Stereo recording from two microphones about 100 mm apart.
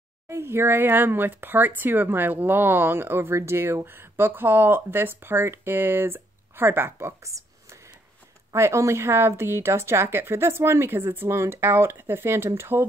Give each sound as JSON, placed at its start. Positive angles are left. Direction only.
{"t": 0.3, "sound": "speech", "side_deg": -25}
{"t": 8.5, "sound": "speech", "side_deg": -30}